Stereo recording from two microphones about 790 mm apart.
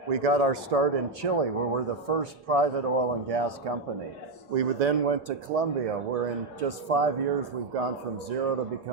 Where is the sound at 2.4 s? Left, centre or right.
Right.